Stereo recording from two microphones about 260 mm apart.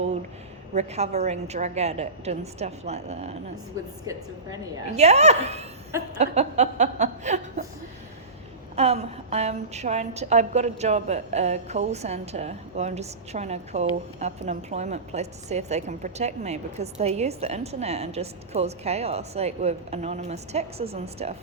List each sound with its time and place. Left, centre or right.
0.7 s a woman's voice: right
4.9 s a woman's voice: right
8.7 s a woman's voice: right